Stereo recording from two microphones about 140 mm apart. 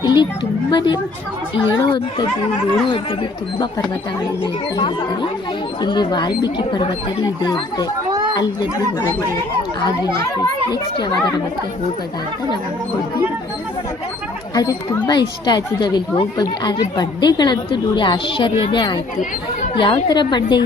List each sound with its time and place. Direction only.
0.0 s a sound: 35° left (ahead or behind)
0.7 s a woman's voice: 30° left (ahead or behind)
5.8 s a woman's voice: 30° left (ahead or behind)
9.8 s speech: 25° left (ahead or behind)
14.5 s a woman's voice: 25° left (ahead or behind)